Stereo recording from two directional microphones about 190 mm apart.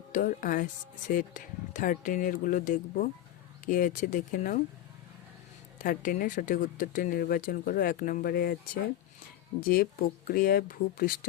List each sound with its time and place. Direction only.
0.1 s speech: 45° left (ahead or behind)
5.8 s speech: 45° left (ahead or behind)